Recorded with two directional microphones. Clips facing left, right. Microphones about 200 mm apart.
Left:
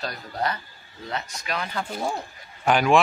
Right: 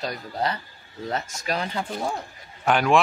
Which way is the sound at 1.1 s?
45° right (ahead or behind).